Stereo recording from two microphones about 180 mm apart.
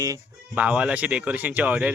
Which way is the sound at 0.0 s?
20° right (ahead or behind).